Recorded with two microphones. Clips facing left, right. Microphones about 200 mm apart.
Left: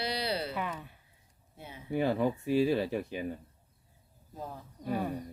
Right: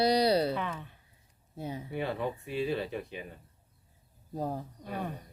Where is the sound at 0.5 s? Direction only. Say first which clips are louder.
Right 2 dB; 10° left (ahead or behind).